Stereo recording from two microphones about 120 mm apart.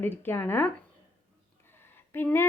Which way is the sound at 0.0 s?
15° left (ahead or behind).